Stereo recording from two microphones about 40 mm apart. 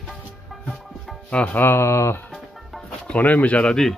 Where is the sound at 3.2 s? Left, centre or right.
Left.